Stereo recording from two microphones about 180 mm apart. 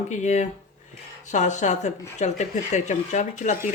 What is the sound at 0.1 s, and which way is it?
Speech, 40° left (ahead or behind).